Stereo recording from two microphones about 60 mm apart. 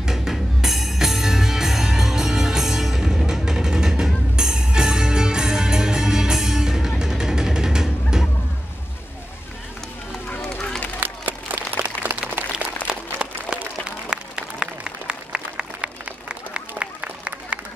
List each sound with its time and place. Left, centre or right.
0.0 s music: centre
11.0 s applause: right
12.0 s a sound: right
12.8 s applause: centre